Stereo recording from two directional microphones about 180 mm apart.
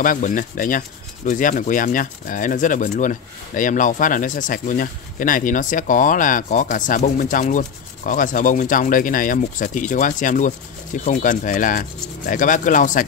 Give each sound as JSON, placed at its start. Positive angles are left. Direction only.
{"t": 0.0, "sound": "speech", "side_deg": 50}